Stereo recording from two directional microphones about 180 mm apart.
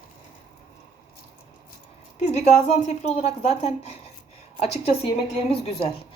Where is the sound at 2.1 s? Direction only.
40° left (ahead or behind).